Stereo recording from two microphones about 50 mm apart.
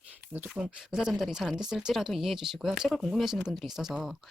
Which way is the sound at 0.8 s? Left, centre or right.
Centre.